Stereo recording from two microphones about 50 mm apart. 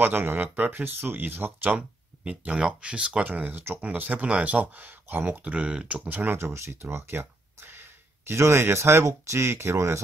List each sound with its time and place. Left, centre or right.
0.0 s speech: right
1.8 s speech: right
5.2 s speech: right
6.0 s speech: right
6.4 s a sound: right
8.4 s speech: right